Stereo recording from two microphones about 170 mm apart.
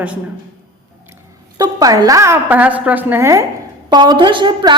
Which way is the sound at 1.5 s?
20° right (ahead or behind).